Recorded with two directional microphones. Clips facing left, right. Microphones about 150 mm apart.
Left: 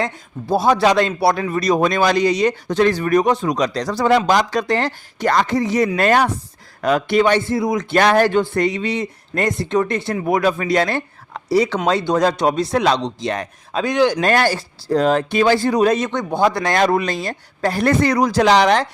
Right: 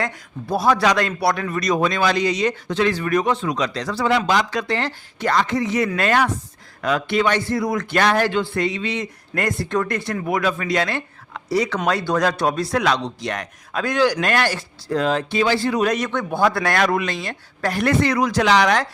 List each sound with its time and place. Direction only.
0.0 s a man's voice: 25° left (ahead or behind)
7.9 s a man's voice: 45° left (ahead or behind)
9.3 s speech: 20° left (ahead or behind)
10.2 s speech: 35° left (ahead or behind); by 14.2 s 20° left (ahead or behind)
14.2 s a man's voice: 35° left (ahead or behind)
15.8 s a man's voice: 25° left (ahead or behind)